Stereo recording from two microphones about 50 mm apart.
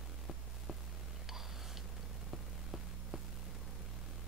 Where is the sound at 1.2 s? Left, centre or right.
Centre.